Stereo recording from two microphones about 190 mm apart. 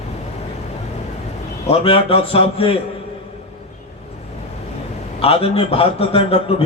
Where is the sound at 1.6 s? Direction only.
30° left (ahead or behind).